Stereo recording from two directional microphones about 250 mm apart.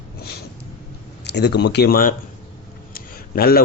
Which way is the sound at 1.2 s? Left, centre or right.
Left.